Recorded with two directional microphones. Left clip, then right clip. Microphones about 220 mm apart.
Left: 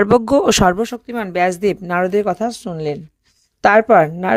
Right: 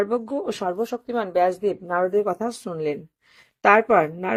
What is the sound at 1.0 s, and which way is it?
Speech, 40° left (ahead or behind).